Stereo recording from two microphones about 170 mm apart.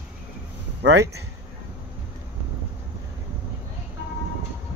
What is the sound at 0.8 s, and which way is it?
Speech, 90° right.